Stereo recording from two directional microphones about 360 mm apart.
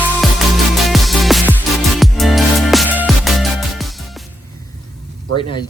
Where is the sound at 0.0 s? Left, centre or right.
Centre.